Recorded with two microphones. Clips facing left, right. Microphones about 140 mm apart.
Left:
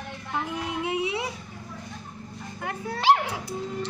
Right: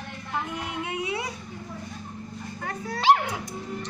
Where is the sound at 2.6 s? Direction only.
10° left (ahead or behind).